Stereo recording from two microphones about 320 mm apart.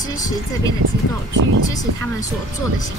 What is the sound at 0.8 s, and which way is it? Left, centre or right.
Speech, right.